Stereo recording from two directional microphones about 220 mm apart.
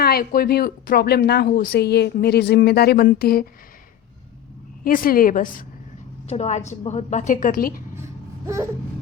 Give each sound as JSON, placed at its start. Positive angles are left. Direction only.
{"t": 0.0, "sound": "speech", "side_deg": 45}
{"t": 4.8, "sound": "a woman's voice", "side_deg": 40}